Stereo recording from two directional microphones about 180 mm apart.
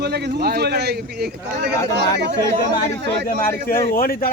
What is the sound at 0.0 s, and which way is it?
A man's voice, 65° right (ahead or behind).